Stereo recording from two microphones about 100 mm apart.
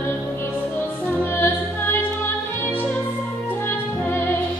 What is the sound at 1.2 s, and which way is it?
Music, 20° left (ahead or behind).